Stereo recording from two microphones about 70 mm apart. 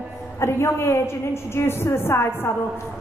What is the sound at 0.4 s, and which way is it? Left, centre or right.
A woman's voice, left.